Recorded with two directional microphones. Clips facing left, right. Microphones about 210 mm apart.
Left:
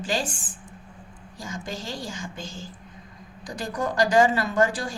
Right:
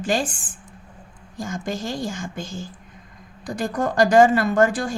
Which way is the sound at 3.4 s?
50° right (ahead or behind).